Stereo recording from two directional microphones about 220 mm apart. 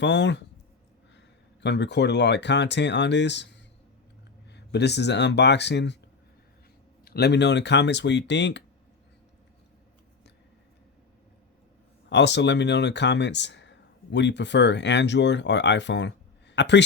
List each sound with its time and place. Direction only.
0.0 s speech: 55° left (ahead or behind)
1.6 s speech: 50° left (ahead or behind)
7.0 s speech: 45° left (ahead or behind)
12.0 s speech: 50° left (ahead or behind)